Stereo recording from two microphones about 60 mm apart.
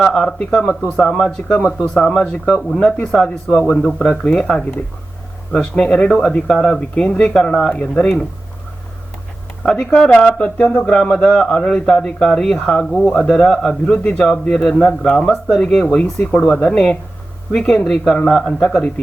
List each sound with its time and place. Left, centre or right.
0.0 s a man's voice: centre
7.7 s speech: left
9.6 s a man's voice: centre